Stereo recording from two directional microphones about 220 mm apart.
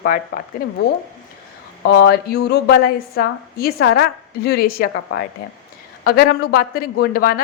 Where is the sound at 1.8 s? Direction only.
50° left (ahead or behind).